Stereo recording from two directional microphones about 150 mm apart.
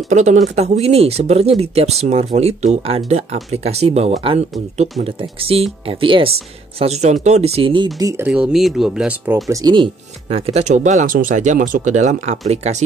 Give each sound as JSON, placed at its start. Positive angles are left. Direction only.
{"t": 0.1, "sound": "speech", "side_deg": -50}
{"t": 6.8, "sound": "speech", "side_deg": -45}
{"t": 8.3, "sound": "speech", "side_deg": -5}
{"t": 9.5, "sound": "speech", "side_deg": -25}
{"t": 10.2, "sound": "speech", "side_deg": -45}